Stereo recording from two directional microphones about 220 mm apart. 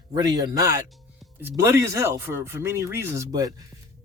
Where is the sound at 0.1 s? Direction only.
15° right (ahead or behind).